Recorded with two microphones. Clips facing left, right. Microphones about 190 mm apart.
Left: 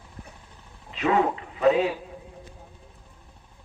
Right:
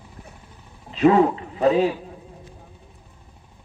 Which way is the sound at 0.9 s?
35° right (ahead or behind).